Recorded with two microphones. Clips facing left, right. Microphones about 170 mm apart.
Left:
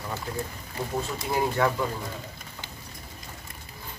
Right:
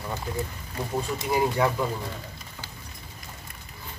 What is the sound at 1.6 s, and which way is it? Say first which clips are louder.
Speech: left 2 dB; 15° right (ahead or behind).